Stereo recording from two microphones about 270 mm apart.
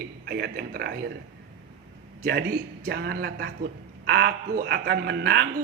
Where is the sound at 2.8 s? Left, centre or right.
Right.